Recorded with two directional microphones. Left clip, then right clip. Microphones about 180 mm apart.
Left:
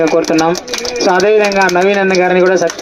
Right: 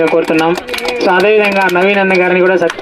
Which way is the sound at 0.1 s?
40° right (ahead or behind).